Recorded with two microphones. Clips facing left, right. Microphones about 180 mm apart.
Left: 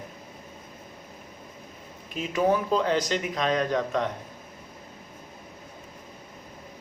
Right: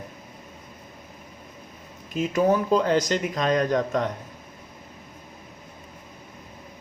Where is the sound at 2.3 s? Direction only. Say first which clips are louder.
Right 2 dB; 45° right (ahead or behind).